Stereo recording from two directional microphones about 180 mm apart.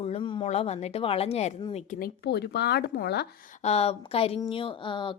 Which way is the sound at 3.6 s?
35° left (ahead or behind).